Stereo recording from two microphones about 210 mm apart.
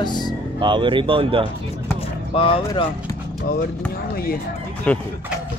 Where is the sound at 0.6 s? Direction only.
20° right (ahead or behind).